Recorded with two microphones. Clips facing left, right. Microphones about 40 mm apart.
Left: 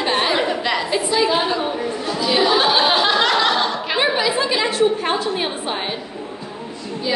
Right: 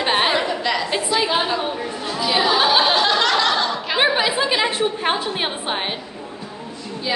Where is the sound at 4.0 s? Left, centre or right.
Right.